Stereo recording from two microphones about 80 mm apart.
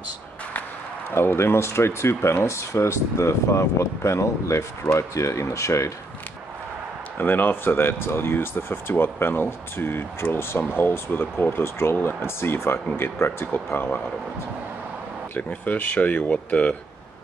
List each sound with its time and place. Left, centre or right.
1.1 s speech: left
7.2 s speech: left
15.3 s speech: centre